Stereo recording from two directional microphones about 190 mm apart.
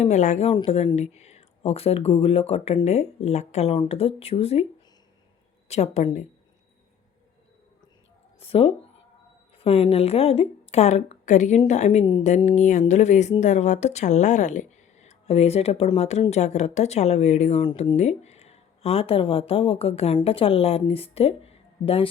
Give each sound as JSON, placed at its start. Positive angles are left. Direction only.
{"t": 0.0, "sound": "speech", "side_deg": 40}
{"t": 5.6, "sound": "speech", "side_deg": 35}
{"t": 8.4, "sound": "speech", "side_deg": 30}
{"t": 17.6, "sound": "speech", "side_deg": 25}
{"t": 17.9, "sound": "speech", "side_deg": 35}